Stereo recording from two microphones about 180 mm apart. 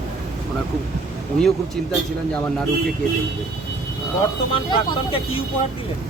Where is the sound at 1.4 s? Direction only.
Centre (ahead or behind).